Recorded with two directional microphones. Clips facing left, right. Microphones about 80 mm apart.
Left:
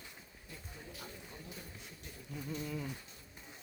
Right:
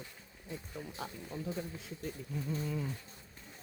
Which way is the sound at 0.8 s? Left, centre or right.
Right.